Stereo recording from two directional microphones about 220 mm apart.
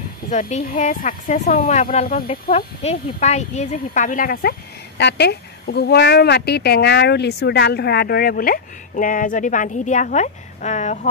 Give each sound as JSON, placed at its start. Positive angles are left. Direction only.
{"t": 0.3, "sound": "speech", "side_deg": 30}